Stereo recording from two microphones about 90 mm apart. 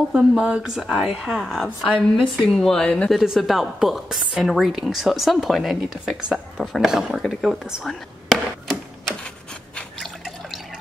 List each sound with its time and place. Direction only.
0.1 s a woman's voice: 10° right (ahead or behind)
7.9 s a sound: 5° left (ahead or behind)
9.8 s drip: centre (ahead or behind)